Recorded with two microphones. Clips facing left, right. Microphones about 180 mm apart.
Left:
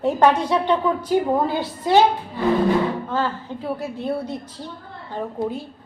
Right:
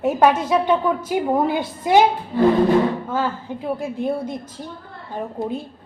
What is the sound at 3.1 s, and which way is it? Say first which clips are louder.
A woman's voice: right 1 dB; 10° right (ahead or behind).